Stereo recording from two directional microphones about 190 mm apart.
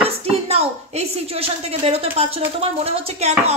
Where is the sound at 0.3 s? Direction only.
30° right (ahead or behind).